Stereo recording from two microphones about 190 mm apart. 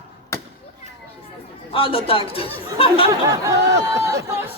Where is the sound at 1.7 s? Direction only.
30° left (ahead or behind).